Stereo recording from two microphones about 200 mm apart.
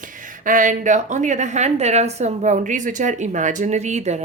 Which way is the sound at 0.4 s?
40° right (ahead or behind).